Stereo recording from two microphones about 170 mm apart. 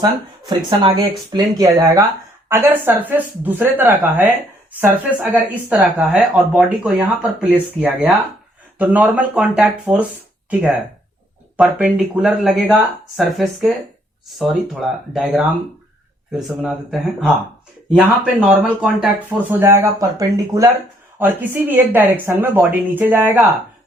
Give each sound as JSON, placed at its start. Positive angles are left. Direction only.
{"t": 0.0, "sound": "speech", "side_deg": -25}
{"t": 11.5, "sound": "speech", "side_deg": -5}